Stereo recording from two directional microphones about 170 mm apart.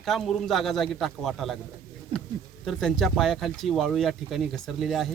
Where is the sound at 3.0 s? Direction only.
Centre (ahead or behind).